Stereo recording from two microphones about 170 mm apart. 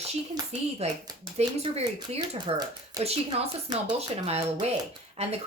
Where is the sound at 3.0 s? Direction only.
35° right (ahead or behind).